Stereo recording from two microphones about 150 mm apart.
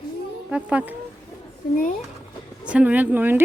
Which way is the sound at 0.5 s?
10° right (ahead or behind).